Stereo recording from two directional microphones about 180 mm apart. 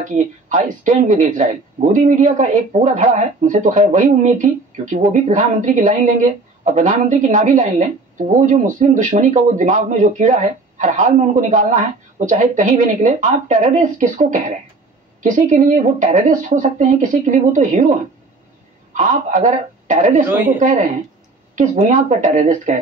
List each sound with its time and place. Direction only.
0.0 s speech: 45° right (ahead or behind)
18.9 s speech: 45° right (ahead or behind)